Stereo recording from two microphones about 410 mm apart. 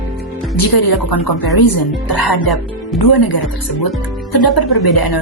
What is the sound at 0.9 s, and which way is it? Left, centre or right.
Speech, centre.